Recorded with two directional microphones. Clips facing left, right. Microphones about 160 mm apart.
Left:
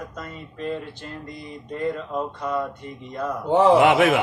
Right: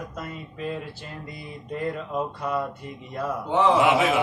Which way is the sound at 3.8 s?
60° left (ahead or behind).